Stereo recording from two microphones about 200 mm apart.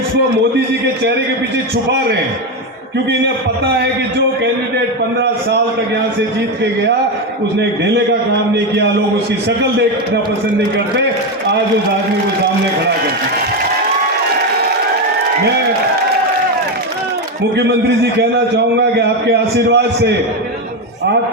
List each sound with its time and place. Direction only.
18.2 s a man's voice: 55° right (ahead or behind)